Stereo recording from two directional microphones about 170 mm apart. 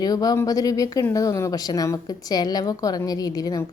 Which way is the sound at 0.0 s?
20° left (ahead or behind).